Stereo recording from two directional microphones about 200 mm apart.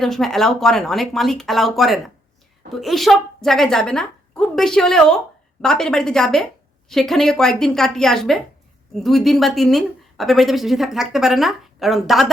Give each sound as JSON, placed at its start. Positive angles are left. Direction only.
{"t": 0.0, "sound": "a woman's voice", "side_deg": 0}